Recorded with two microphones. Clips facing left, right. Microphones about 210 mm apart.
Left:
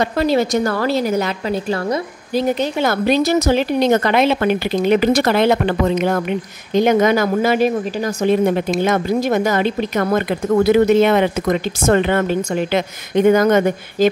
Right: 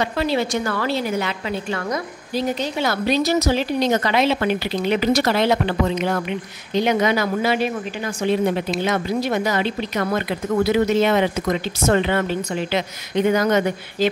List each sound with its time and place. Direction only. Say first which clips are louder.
0.0 s a woman's voice: left 5 dB; 45° left (ahead or behind)
2.3 s a woman's voice: left 5 dB; 50° left (ahead or behind)